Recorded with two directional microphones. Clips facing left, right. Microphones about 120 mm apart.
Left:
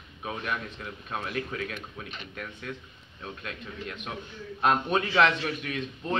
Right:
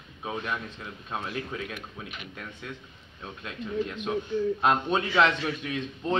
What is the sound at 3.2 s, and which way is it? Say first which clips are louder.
A man's voice: right 1 dB; 15° right (ahead or behind).